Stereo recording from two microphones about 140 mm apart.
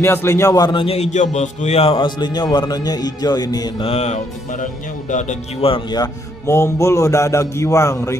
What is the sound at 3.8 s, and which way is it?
Speech, 50° left (ahead or behind).